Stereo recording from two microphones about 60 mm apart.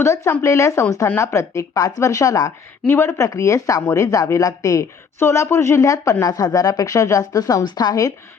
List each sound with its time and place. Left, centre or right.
0.0 s speech: left
1.0 s speech: left
3.0 s speech: left
5.2 s speech: left